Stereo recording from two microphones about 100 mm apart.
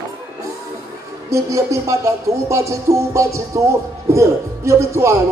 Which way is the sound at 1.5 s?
30° right (ahead or behind).